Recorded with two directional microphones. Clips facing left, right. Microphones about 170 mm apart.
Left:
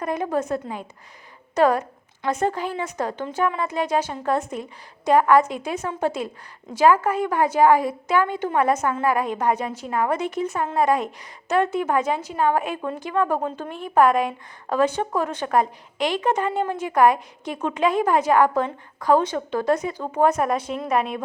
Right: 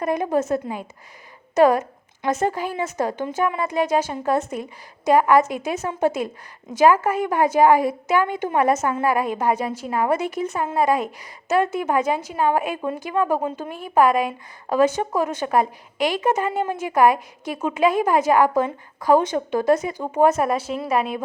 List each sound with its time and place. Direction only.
0.0 s a woman's voice: 15° right (ahead or behind)
1.6 s a woman's voice: 15° right (ahead or behind)